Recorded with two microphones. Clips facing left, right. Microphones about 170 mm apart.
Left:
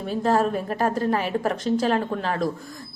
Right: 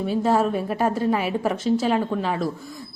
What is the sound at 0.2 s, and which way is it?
A woman's voice, 5° right (ahead or behind).